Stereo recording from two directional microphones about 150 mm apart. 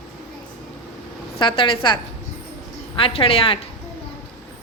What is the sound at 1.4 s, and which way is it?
A woman's voice, 35° left (ahead or behind).